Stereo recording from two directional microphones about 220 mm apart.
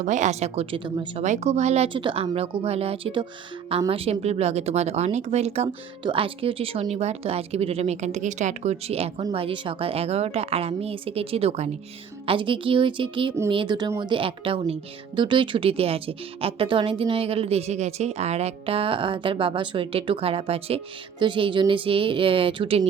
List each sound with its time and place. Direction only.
0.0 s speech: 35° right (ahead or behind)